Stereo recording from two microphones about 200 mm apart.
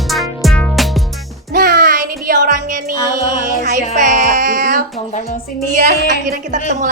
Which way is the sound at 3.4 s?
40° right (ahead or behind).